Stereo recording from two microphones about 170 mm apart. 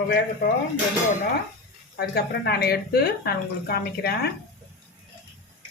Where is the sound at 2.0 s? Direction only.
70° left (ahead or behind).